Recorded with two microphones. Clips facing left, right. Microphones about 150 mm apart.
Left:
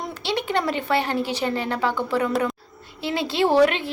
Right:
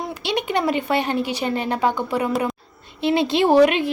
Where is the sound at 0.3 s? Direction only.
15° right (ahead or behind).